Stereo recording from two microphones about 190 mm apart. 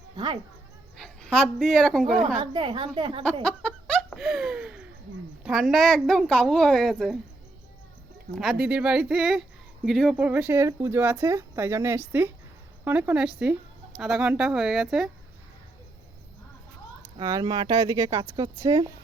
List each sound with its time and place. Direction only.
0.9 s speech: 5° left (ahead or behind)
2.4 s speech: 25° right (ahead or behind)
3.4 s laughter: 5° left (ahead or behind)
5.4 s speech: centre (ahead or behind)
8.4 s speech: centre (ahead or behind)
17.2 s speech: 20° right (ahead or behind)